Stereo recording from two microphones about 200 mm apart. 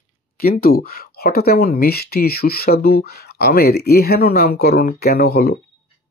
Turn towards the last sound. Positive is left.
turn(degrees=50)  # may be behind; listen again after turning